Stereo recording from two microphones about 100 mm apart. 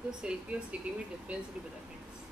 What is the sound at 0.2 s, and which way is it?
Speech, 10° right (ahead or behind).